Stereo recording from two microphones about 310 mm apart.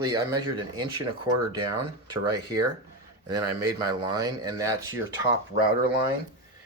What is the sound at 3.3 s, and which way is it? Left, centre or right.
Speech, right.